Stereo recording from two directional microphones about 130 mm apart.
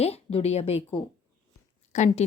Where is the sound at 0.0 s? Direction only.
50° left (ahead or behind).